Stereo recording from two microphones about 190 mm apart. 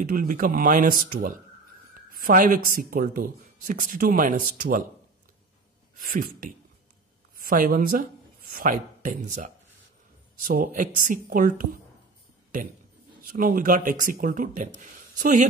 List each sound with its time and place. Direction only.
0.0 s speech: 45° right (ahead or behind)
5.9 s speech: 45° right (ahead or behind)
13.2 s speech: 45° right (ahead or behind)